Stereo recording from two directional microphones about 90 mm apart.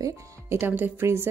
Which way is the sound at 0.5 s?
25° right (ahead or behind).